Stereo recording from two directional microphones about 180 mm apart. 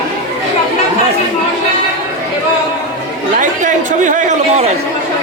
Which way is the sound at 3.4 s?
45° right (ahead or behind).